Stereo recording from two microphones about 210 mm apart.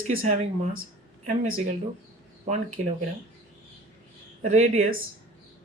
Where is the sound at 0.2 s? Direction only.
40° right (ahead or behind).